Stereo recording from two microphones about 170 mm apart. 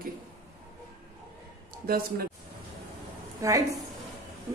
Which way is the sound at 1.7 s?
60° right (ahead or behind).